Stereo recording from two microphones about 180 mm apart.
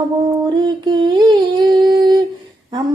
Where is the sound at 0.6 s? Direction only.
25° right (ahead or behind).